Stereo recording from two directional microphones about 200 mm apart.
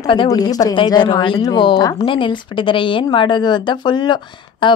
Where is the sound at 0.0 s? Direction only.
20° left (ahead or behind).